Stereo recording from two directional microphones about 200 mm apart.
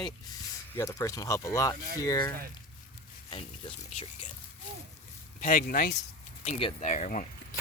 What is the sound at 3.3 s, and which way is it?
Speech, 25° left (ahead or behind).